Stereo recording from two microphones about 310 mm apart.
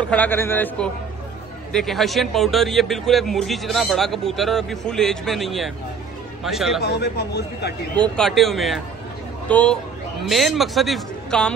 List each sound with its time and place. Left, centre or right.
0.1 s a man's voice: centre
6.8 s a man's voice: left
7.9 s a man's voice: centre